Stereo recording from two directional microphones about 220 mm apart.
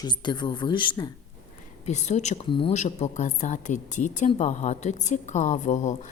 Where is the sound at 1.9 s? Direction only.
30° left (ahead or behind).